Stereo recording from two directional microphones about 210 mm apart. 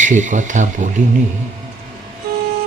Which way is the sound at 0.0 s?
35° right (ahead or behind).